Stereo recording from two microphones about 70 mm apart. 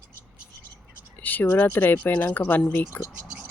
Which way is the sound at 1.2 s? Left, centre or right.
Left.